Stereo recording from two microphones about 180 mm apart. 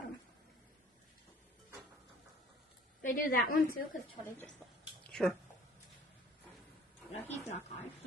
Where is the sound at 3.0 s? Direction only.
50° left (ahead or behind).